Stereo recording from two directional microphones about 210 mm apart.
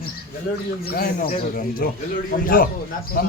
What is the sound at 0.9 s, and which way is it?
Speech, 45° left (ahead or behind).